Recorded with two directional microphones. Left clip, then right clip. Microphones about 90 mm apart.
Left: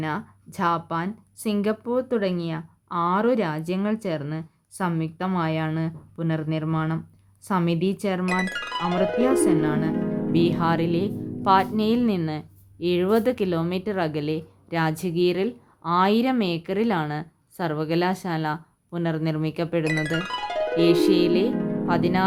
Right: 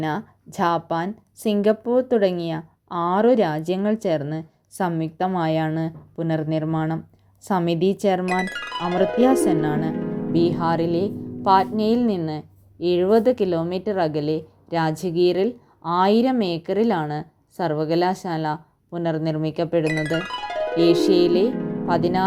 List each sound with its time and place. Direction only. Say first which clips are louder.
0.0 s a woman's voice: right 3 dB; 35° right (ahead or behind)
8.2 s speech: right 2 dB; centre (ahead or behind)
9.5 s speech: right 1 dB; 30° right (ahead or behind)
9.9 s speech: right 1 dB; centre (ahead or behind); by 19.8 s 15° right (ahead or behind)
19.8 s music: right 2 dB; centre (ahead or behind)
20.7 s speech: right 2 dB; 15° right (ahead or behind)
21.5 s music: left 1 dB; centre (ahead or behind)
21.8 s speech: right 3 dB; 15° right (ahead or behind)